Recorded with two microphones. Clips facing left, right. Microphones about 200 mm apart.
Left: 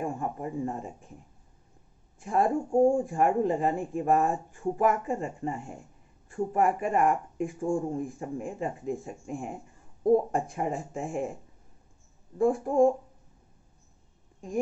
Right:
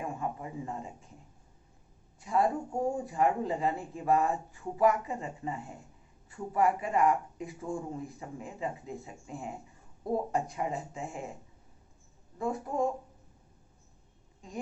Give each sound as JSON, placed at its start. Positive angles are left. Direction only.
{"t": 0.0, "sound": "speech", "side_deg": 45}
{"t": 2.1, "sound": "speech", "side_deg": 50}
{"t": 12.4, "sound": "speech", "side_deg": 50}